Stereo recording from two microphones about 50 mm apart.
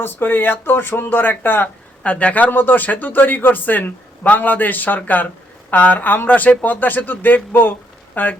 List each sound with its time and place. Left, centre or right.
0.0 s speech: left
2.0 s speech: left